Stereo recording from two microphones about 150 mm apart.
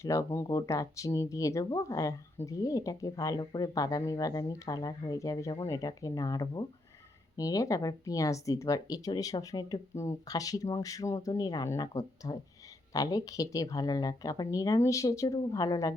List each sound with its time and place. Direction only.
0.0 s speech: 20° left (ahead or behind)